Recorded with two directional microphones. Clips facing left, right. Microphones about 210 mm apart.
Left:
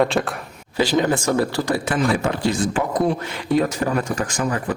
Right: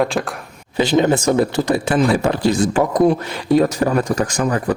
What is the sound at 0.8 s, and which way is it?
A man's voice, 20° right (ahead or behind).